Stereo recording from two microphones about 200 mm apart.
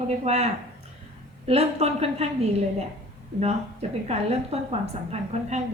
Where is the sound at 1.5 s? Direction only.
30° right (ahead or behind).